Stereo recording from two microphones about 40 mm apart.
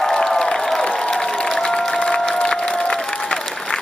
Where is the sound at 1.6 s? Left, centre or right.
Left.